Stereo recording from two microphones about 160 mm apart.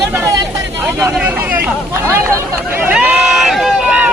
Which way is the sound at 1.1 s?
10° right (ahead or behind).